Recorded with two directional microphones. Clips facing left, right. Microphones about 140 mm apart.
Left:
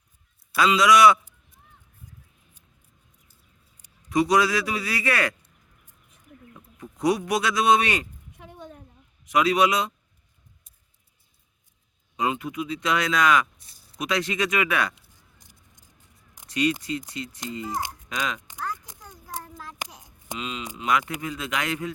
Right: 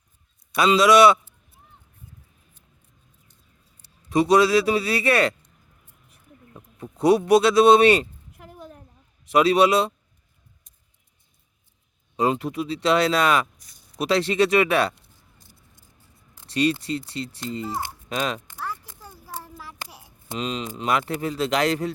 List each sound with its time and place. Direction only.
0.5 s speech: 25° right (ahead or behind)
3.8 s a sound: 10° left (ahead or behind)
4.1 s speech: 25° right (ahead or behind)
6.5 s speech: 25° right (ahead or behind)
8.3 s a sound: 5° right (ahead or behind)
9.2 s speech: 30° right (ahead or behind)
12.1 s speech: 35° right (ahead or behind)
15.1 s a sound: 15° left (ahead or behind)
16.5 s speech: 30° right (ahead or behind)
17.2 s a child's voice: 15° left (ahead or behind)
18.6 s a sound: 5° right (ahead or behind)
20.4 s speech: 35° right (ahead or behind)